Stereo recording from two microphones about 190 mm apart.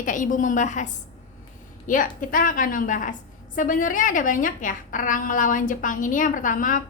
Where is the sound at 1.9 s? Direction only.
45° left (ahead or behind).